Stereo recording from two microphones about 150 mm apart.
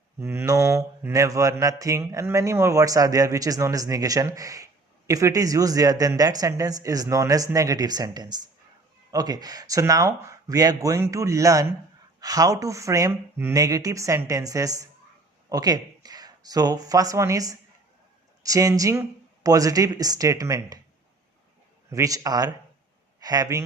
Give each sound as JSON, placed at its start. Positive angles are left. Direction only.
{"t": 0.2, "sound": "mantra", "side_deg": -15}
{"t": 15.4, "sound": "speech", "side_deg": -25}
{"t": 18.4, "sound": "mantra", "side_deg": -25}
{"t": 21.8, "sound": "mantra", "side_deg": -20}